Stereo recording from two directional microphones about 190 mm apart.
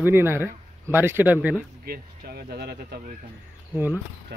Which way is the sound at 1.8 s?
55° right (ahead or behind).